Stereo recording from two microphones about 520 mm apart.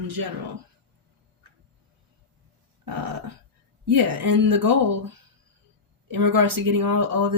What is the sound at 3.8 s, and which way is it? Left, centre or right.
Speech, right.